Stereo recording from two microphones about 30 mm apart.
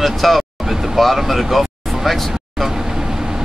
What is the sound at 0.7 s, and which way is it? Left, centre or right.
Speech, centre.